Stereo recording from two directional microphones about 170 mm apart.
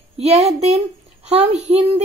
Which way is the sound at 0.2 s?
40° right (ahead or behind).